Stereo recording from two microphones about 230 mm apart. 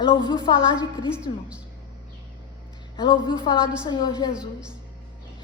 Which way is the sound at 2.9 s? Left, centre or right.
Centre.